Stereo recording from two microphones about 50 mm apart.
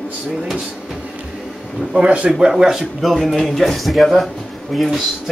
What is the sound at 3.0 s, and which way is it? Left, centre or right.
Speech, centre.